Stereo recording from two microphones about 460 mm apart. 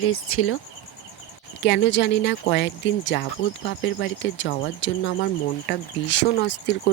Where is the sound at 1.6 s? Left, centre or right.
Left.